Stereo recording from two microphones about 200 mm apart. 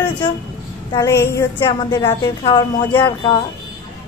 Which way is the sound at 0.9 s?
15° left (ahead or behind).